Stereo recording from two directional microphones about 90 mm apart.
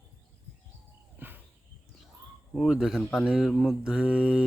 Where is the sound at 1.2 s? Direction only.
20° right (ahead or behind).